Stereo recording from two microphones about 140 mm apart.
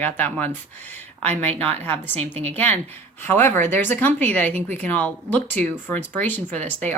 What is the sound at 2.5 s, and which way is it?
Speech, 10° left (ahead or behind).